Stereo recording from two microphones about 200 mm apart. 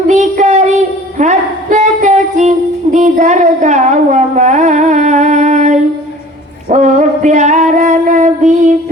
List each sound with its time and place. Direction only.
0.1 s child singing: 35° right (ahead or behind)
1.2 s singing: 35° right (ahead or behind)
6.7 s female singing: 35° right (ahead or behind)